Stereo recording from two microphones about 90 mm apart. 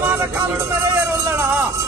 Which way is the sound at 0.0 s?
25° right (ahead or behind).